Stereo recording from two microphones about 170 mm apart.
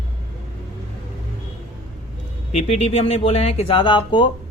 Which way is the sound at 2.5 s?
40° left (ahead or behind).